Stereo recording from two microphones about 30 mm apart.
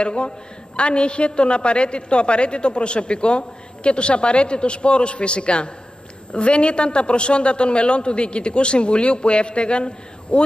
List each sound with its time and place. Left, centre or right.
0.0 s a woman's voice: left